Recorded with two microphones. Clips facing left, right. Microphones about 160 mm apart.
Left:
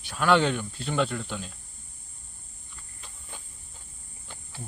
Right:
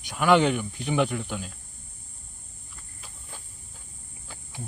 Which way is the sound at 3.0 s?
5° right (ahead or behind).